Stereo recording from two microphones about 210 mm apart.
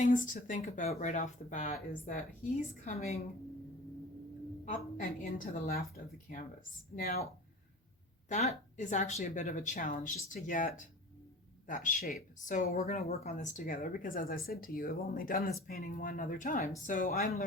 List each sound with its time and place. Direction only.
0.0 s speech: 40° left (ahead or behind)
4.7 s speech: 40° left (ahead or behind)
6.9 s speech: 35° left (ahead or behind)
8.3 s speech: 35° left (ahead or behind)